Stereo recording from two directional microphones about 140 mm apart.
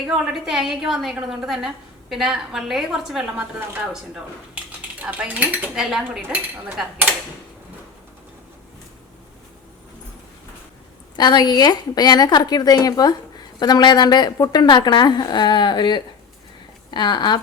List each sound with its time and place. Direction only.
0.1 s a woman's voice: 5° right (ahead or behind)
11.2 s a woman's voice: 30° left (ahead or behind)